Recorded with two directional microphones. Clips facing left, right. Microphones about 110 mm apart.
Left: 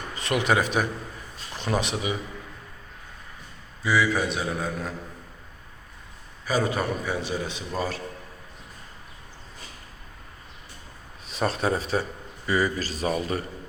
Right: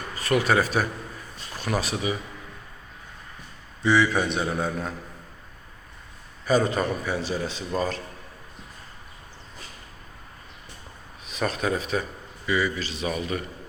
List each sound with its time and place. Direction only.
0.2 s a man's voice: 20° left (ahead or behind)
3.8 s speech: 5° left (ahead or behind)
6.4 s a man's voice: 5° left (ahead or behind)
11.3 s a man's voice: 30° left (ahead or behind)